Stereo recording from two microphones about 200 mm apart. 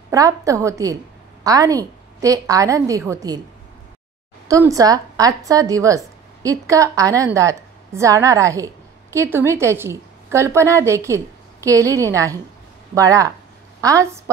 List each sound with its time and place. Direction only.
0.1 s a woman's voice: 15° right (ahead or behind)
4.5 s a woman's voice: 15° right (ahead or behind)